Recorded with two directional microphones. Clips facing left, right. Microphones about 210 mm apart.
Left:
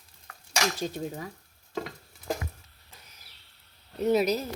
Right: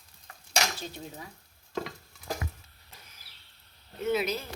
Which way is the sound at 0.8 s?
45° left (ahead or behind).